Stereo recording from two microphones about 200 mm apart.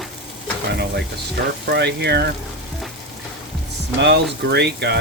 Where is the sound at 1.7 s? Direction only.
55° right (ahead or behind).